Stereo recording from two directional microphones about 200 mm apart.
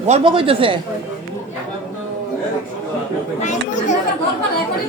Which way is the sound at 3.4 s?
35° left (ahead or behind).